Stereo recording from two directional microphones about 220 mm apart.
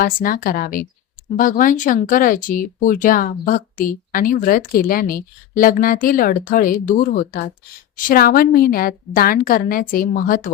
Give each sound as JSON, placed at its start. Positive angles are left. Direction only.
{"t": 0.0, "sound": "speech", "side_deg": 40}